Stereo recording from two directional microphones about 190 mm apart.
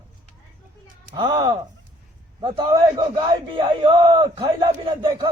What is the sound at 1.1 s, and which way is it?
A man's voice, 25° right (ahead or behind).